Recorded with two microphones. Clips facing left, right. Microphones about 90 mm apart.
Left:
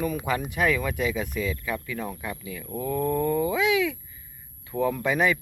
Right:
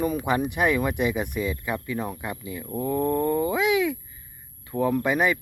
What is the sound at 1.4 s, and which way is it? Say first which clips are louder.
Speech: right 1 dB; 30° right (ahead or behind).